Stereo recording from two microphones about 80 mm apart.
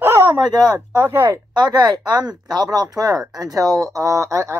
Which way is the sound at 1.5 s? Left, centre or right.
Right.